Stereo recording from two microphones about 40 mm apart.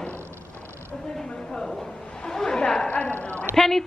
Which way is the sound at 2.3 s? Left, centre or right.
Centre.